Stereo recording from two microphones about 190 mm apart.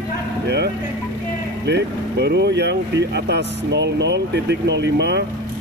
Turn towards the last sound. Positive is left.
turn(degrees=-60)  # may be behind; listen again after turning